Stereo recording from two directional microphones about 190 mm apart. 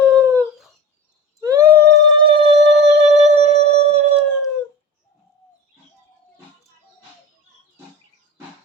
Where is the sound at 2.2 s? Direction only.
30° right (ahead or behind).